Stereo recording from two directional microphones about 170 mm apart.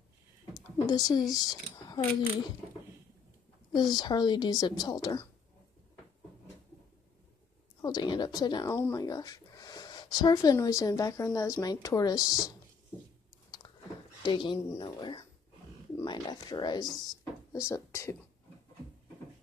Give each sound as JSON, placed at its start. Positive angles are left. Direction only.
{"t": 0.6, "sound": "speech", "side_deg": 25}
{"t": 3.7, "sound": "speech", "side_deg": 25}
{"t": 7.8, "sound": "speech", "side_deg": 25}
{"t": 14.2, "sound": "speech", "side_deg": 25}
{"t": 17.2, "sound": "a sound", "side_deg": 15}